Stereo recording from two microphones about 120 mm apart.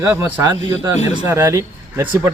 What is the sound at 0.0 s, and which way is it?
A man's voice, 20° right (ahead or behind).